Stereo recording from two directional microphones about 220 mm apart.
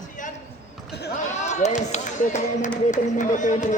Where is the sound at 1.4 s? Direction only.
30° left (ahead or behind).